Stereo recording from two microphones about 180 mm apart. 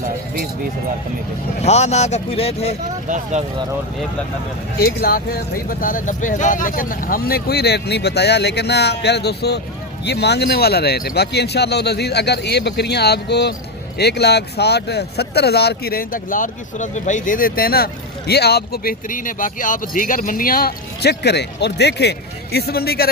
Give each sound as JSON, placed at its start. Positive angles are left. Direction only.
{"t": 1.6, "sound": "speech", "side_deg": 40}
{"t": 4.8, "sound": "speech", "side_deg": 60}